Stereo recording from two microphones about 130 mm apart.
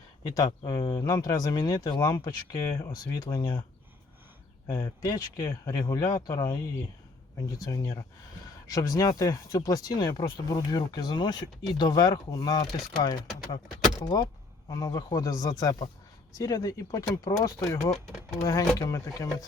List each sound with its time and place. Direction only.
0.3 s speech: 30° left (ahead or behind)
4.7 s speech: 30° left (ahead or behind)